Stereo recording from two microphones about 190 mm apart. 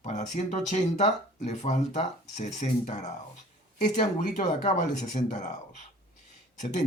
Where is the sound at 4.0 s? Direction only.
40° left (ahead or behind).